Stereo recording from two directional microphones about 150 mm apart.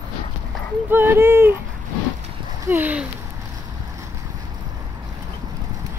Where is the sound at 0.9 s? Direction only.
15° right (ahead or behind).